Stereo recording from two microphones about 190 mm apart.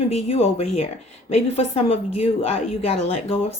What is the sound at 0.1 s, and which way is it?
A woman's voice, 35° left (ahead or behind).